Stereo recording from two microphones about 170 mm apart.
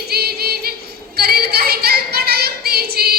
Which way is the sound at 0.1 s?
65° right (ahead or behind).